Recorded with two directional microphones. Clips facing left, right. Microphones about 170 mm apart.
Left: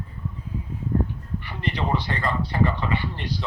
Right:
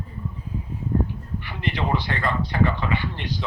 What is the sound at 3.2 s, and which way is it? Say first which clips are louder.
Speech: even; 35° left (ahead or behind).